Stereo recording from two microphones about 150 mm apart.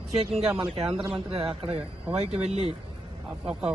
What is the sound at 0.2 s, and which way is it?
Speech, 40° right (ahead or behind).